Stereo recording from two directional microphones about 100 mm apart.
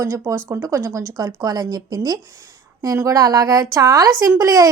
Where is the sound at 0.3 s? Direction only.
35° right (ahead or behind).